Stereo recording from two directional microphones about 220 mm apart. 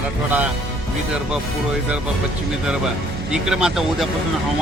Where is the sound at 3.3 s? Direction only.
5° right (ahead or behind).